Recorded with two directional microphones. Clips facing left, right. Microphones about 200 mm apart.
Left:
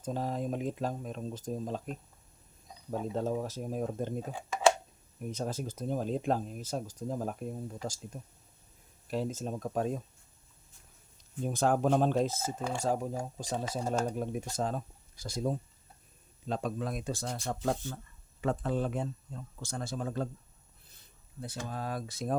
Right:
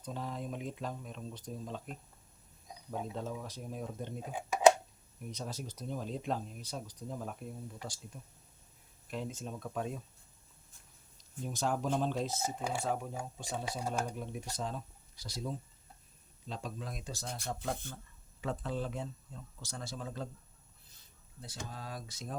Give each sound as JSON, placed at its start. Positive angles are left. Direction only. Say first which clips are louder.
{"t": 0.0, "sound": "speech", "louder": "left 7 dB", "side_deg": 40}
{"t": 2.9, "sound": "speech", "louder": "left 7 dB", "side_deg": 40}
{"t": 4.3, "sound": "speech", "louder": "right 3 dB", "side_deg": -15}
{"t": 5.3, "sound": "speech", "louder": "left 7 dB", "side_deg": 50}
{"t": 11.4, "sound": "speech", "louder": "left 7 dB", "side_deg": 55}
{"t": 12.4, "sound": "speech", "louder": "left 1 dB", "side_deg": -10}
{"t": 12.8, "sound": "speech", "louder": "left 5 dB", "side_deg": 40}
{"t": 21.6, "sound": "speech", "louder": "left 7 dB", "side_deg": 55}